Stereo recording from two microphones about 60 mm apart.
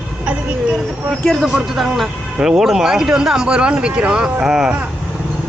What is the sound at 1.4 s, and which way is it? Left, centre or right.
Speech, centre.